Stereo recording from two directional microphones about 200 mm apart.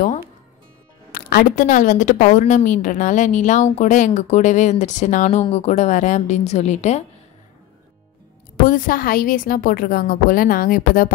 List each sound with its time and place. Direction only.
1.1 s a woman's voice: 45° left (ahead or behind)
8.5 s a woman's voice: 45° left (ahead or behind)